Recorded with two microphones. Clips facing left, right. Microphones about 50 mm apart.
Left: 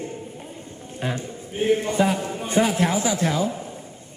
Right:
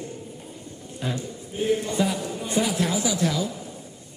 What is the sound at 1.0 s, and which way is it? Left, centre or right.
A man's voice, left.